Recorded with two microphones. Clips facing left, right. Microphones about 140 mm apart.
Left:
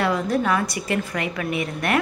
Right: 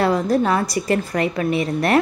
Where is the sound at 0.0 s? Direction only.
35° right (ahead or behind).